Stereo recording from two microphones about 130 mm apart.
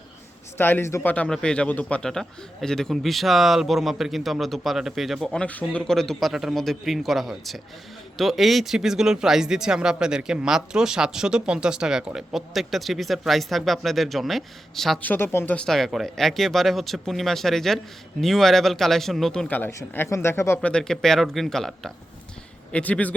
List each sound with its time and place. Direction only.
0.5 s speech: 15° left (ahead or behind)
1.1 s speech: 10° left (ahead or behind)
15.0 s speech: 15° left (ahead or behind)
15.6 s speech: centre (ahead or behind); by 20.6 s 20° left (ahead or behind)
20.6 s speech: 10° left (ahead or behind)